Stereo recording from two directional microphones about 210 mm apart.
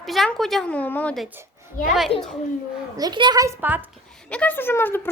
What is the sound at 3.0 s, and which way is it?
Speech, 20° right (ahead or behind).